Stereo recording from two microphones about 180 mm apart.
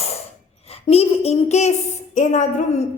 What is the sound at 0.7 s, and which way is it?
A woman's voice, 35° left (ahead or behind).